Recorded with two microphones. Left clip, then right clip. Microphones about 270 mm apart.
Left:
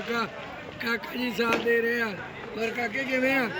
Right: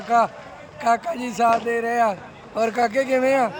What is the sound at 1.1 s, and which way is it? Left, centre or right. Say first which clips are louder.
Speech: right 7 dB; centre.